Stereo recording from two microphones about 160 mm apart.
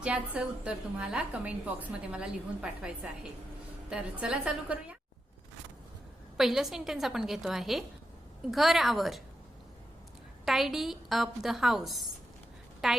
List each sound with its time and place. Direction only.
0.0 s a woman's voice: 5° right (ahead or behind)
6.3 s a woman's voice: centre (ahead or behind)
10.4 s a woman's voice: centre (ahead or behind)